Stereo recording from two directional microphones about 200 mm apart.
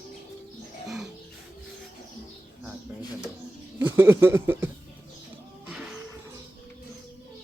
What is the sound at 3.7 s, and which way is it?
Speech, 10° right (ahead or behind).